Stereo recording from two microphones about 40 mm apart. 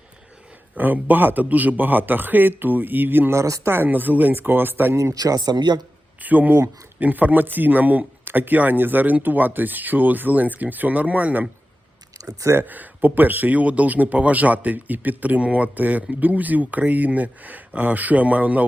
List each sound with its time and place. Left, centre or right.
0.8 s a man's voice: right
3.8 s speech: right
6.2 s a man's voice: right
12.6 s a man's voice: right